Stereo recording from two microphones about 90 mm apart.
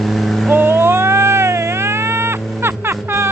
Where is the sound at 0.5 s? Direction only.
25° right (ahead or behind).